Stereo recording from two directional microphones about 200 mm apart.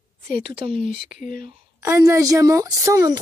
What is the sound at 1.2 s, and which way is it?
Speech, 45° left (ahead or behind).